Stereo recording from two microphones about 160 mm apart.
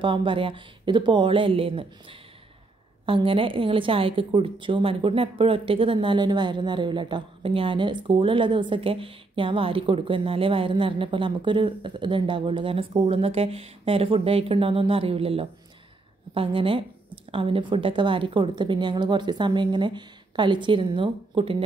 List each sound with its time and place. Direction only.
0.0 s a woman's voice: 30° right (ahead or behind)